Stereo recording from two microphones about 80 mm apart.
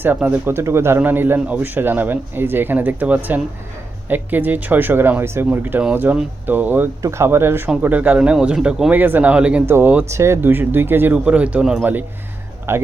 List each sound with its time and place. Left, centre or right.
0.4 s a man's voice: right
7.0 s speech: right; by 8.9 s centre
8.9 s a man's voice: right
9.6 s a man's voice: right
11.3 s speech: centre
11.6 s speech: centre
12.7 s speech: right